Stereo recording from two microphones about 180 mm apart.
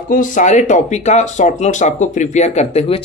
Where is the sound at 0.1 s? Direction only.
45° left (ahead or behind).